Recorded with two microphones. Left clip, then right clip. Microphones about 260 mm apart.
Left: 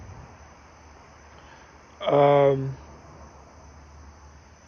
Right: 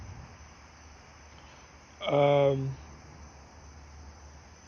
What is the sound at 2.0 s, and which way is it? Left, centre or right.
Speech, centre.